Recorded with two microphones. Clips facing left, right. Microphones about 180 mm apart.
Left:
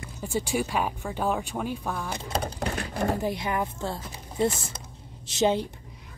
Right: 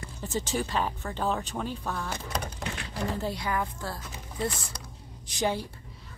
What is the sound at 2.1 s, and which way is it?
Speech, 30° left (ahead or behind).